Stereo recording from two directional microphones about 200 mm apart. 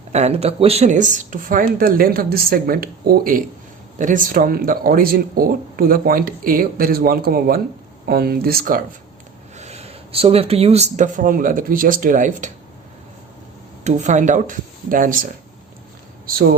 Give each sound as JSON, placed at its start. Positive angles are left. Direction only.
{"t": 0.1, "sound": "speech", "side_deg": -35}
{"t": 9.6, "sound": "speech", "side_deg": -30}
{"t": 13.8, "sound": "a man's voice", "side_deg": -35}